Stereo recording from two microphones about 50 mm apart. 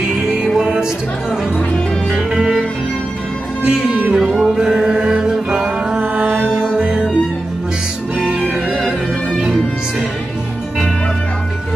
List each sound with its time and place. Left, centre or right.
0.0 s music: centre
2.3 s music: centre
3.6 s music: right
5.9 s music: right
6.5 s music: centre
9.4 s music: centre